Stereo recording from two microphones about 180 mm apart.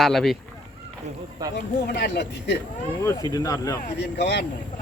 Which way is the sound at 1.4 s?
20° right (ahead or behind).